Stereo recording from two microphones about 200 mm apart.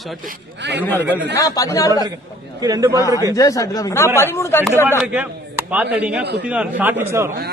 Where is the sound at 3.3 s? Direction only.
15° left (ahead or behind).